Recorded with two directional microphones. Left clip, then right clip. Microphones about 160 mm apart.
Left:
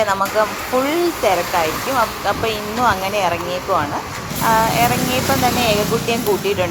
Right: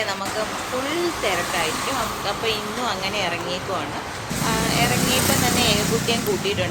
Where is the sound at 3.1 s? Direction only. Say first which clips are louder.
Left 6 dB; 40° left (ahead or behind).